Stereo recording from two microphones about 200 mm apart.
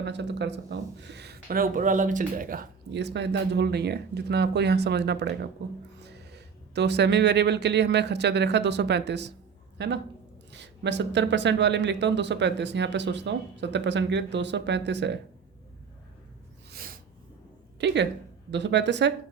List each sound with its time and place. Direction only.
0.0 s a man's voice: 60° right (ahead or behind)
17.7 s a woman's voice: 60° right (ahead or behind)